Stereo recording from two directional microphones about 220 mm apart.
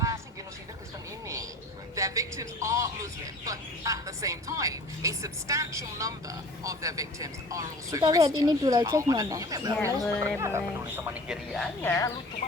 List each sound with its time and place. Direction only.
2.0 s speech: 15° right (ahead or behind); by 12.1 s 10° left (ahead or behind)